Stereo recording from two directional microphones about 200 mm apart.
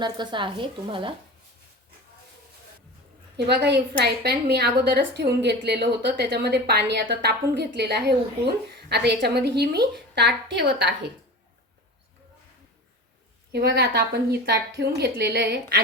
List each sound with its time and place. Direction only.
0.0 s a woman's voice: 20° right (ahead or behind)
3.3 s a woman's voice: 55° right (ahead or behind)
13.5 s a woman's voice: 55° right (ahead or behind)